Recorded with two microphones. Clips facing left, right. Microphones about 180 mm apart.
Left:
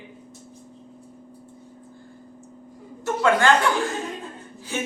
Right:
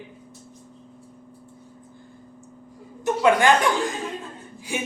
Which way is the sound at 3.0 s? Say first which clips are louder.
Right 2 dB; 15° right (ahead or behind).